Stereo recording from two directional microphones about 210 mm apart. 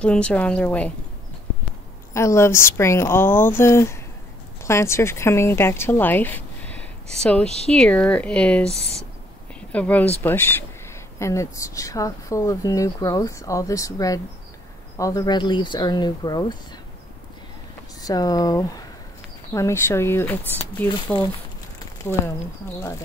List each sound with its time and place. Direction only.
0.0 s speech: 5° left (ahead or behind)
2.1 s speech: 15° left (ahead or behind)
8.7 s speech: 30° right (ahead or behind)
9.7 s speech: 5° left (ahead or behind)
18.0 s speech: 15° left (ahead or behind)